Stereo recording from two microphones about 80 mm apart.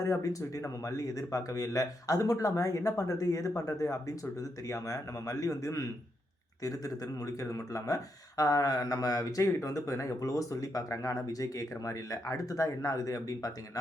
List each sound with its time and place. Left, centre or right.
0.0 s a man's voice: left